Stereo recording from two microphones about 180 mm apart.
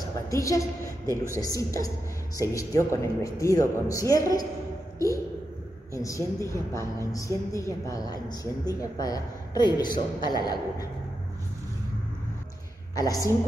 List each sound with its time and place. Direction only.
0.3 s a woman's voice: 15° left (ahead or behind)
12.9 s a woman's voice: 20° left (ahead or behind)